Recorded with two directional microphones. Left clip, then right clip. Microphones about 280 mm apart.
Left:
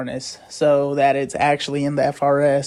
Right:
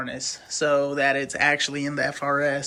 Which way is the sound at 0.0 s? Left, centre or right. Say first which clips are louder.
Left 2 dB; centre.